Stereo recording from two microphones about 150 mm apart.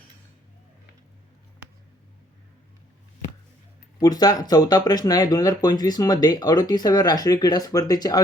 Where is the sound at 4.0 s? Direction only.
25° left (ahead or behind).